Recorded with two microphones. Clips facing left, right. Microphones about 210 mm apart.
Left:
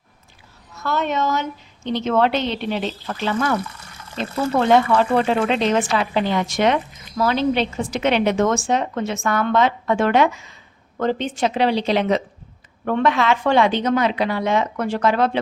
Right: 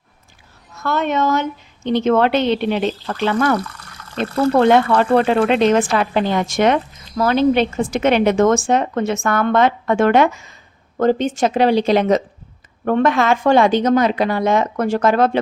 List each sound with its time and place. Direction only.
0.9 s a woman's voice: 55° right (ahead or behind)
4.7 s a woman's voice: 60° right (ahead or behind)